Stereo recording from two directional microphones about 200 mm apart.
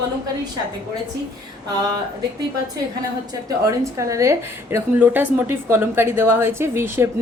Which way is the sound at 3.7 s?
15° right (ahead or behind).